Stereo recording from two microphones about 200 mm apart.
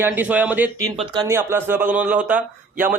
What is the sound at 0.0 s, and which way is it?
Speech, 10° right (ahead or behind).